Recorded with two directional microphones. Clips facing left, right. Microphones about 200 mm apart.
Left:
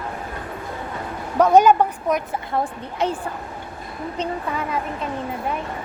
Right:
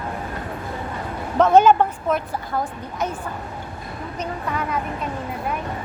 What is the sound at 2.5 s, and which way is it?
Speech, 30° left (ahead or behind).